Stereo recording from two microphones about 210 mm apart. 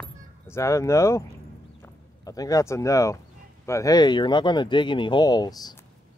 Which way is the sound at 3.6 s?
15° left (ahead or behind).